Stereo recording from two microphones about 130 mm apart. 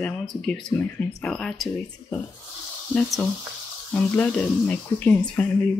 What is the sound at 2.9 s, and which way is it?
Speech, centre (ahead or behind).